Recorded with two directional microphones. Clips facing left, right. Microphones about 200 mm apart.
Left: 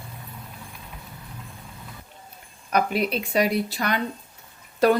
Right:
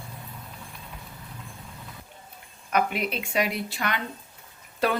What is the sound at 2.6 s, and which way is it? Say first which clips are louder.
Speech: left 3 dB; 35° left (ahead or behind).